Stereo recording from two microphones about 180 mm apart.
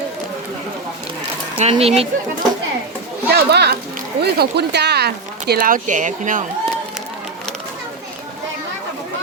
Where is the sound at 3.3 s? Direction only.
60° right (ahead or behind); by 6.4 s 45° right (ahead or behind).